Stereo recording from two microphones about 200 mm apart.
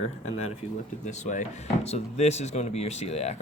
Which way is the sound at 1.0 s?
35° left (ahead or behind).